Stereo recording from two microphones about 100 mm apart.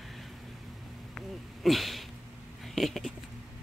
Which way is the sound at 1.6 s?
Centre (ahead or behind).